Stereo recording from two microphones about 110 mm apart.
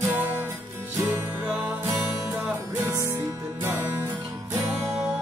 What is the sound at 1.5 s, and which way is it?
Music, 15° right (ahead or behind).